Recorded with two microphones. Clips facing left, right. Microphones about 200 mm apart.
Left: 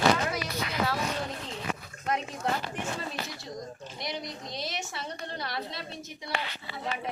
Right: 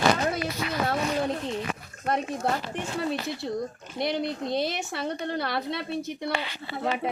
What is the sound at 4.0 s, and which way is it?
Speech, 60° right (ahead or behind).